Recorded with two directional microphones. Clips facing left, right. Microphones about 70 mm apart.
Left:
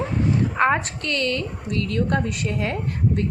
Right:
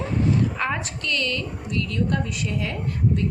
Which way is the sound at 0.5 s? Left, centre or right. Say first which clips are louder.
Left 7 dB; left.